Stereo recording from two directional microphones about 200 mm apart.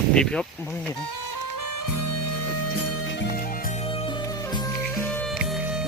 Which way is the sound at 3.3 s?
45° left (ahead or behind).